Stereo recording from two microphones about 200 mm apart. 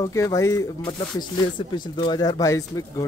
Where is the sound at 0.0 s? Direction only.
15° left (ahead or behind).